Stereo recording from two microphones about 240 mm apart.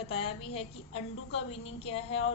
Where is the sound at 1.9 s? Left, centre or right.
Left.